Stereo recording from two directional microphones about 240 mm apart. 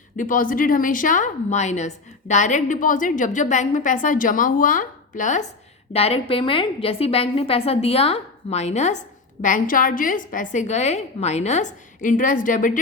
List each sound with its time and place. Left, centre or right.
0.2 s a woman's voice: left